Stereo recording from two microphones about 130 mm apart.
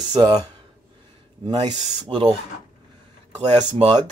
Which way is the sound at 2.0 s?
40° right (ahead or behind).